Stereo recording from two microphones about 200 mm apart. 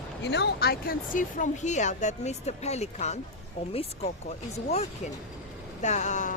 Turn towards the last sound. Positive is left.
turn(degrees=40)  # may be behind; listen again after turning